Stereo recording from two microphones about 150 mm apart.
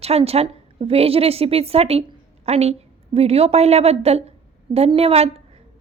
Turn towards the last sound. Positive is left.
turn(degrees=-40)  # may be behind; listen again after turning